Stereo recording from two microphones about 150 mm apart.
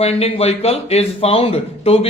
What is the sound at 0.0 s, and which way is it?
A man's voice, 40° left (ahead or behind).